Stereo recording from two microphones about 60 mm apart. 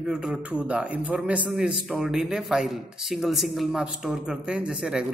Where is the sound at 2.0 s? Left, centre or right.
Centre.